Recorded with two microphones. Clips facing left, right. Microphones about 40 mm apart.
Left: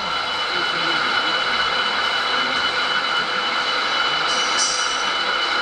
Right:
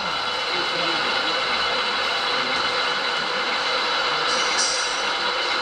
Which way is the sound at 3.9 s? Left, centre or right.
Left.